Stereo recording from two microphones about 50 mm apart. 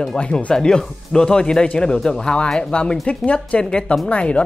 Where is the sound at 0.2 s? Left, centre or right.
Left.